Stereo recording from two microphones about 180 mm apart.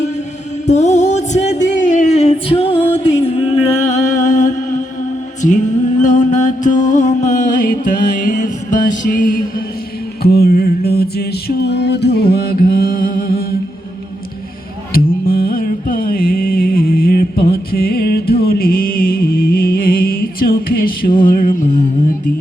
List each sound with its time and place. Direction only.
0.7 s music: 40° left (ahead or behind)
6.0 s music: 45° left (ahead or behind)
10.2 s music: 60° left (ahead or behind)
14.9 s music: 55° left (ahead or behind)